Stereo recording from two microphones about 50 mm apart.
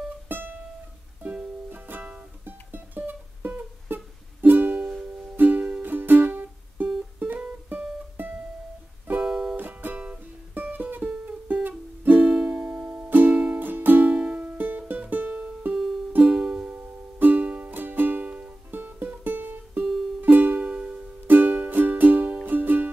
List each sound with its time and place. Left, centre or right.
0.3 s music: right
1.7 s music: right
8.2 s music: right
9.2 s music: centre
9.6 s music: right
12.4 s music: right
13.3 s music: right
13.6 s music: right
14.1 s music: right
14.6 s music: right
16.2 s music: right
16.7 s music: right
20.6 s music: right
21.3 s music: right